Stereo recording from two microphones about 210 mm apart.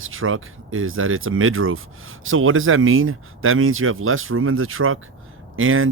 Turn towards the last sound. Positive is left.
turn(degrees=-75)  # may be behind; listen again after turning